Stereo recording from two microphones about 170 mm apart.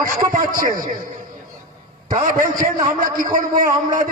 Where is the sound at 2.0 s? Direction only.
55° right (ahead or behind).